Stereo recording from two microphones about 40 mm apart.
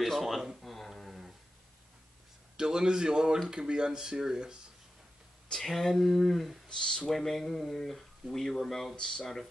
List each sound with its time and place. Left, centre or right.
0.0 s a sound: centre
2.5 s a sound: centre
3.4 s speech: centre
5.5 s speech: centre
6.8 s speech: left
7.1 s speech: centre